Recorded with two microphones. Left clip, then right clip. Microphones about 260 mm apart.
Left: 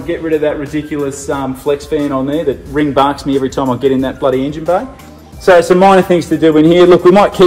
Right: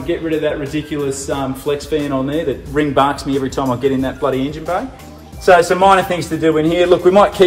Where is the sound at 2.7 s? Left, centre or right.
Centre.